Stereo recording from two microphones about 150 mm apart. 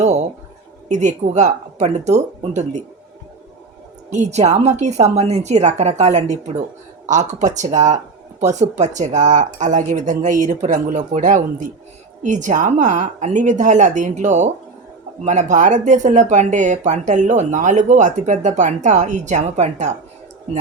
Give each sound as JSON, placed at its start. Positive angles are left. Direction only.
{"t": 0.9, "sound": "speech", "side_deg": -50}
{"t": 4.1, "sound": "speech", "side_deg": -50}